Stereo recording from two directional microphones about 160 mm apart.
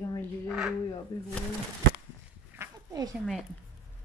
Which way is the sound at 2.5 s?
20° right (ahead or behind).